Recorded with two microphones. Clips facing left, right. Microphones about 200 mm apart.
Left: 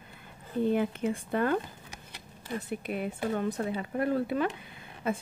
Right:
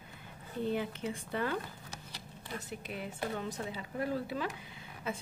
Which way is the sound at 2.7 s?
55° left (ahead or behind).